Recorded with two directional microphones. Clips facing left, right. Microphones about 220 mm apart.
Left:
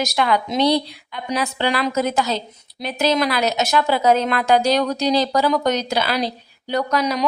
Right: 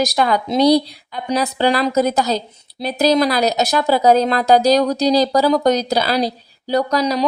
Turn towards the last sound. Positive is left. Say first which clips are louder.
# right 3 dB
turn(degrees=-35)  # may be behind; listen again after turning